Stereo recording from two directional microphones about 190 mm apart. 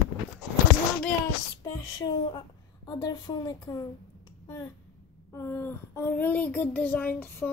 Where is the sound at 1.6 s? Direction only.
25° left (ahead or behind).